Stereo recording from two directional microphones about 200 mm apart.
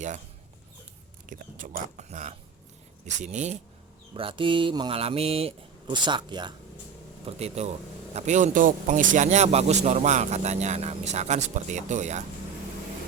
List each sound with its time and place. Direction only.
1.3 s speech: 40° right (ahead or behind)